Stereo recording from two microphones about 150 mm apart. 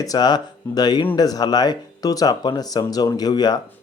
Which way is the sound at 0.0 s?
25° left (ahead or behind).